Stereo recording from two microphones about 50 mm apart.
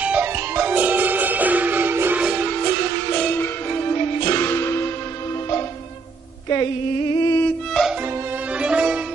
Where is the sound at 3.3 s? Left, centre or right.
Left.